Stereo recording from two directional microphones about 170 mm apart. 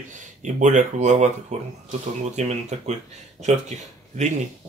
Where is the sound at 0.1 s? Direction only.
45° right (ahead or behind).